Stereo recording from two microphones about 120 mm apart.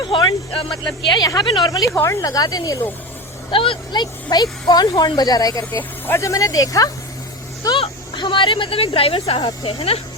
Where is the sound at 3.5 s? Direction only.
45° left (ahead or behind); by 5.7 s 30° left (ahead or behind).